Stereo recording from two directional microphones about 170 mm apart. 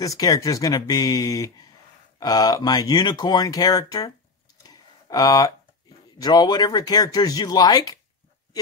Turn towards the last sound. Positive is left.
turn(degrees=25)  # may be behind; listen again after turning